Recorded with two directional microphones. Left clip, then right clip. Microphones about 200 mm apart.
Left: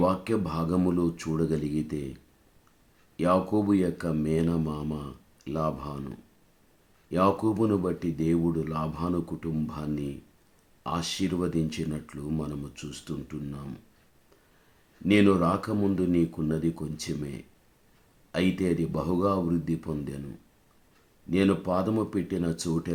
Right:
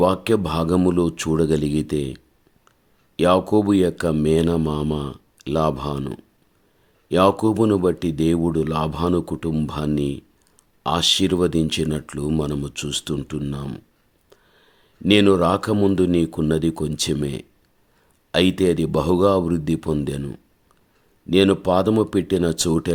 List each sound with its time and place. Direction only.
0.0 s speech: 45° right (ahead or behind)
15.0 s speech: 45° right (ahead or behind)